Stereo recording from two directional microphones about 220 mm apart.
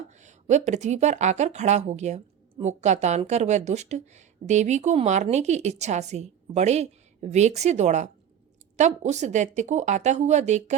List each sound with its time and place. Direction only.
0.2 s speech: 30° right (ahead or behind)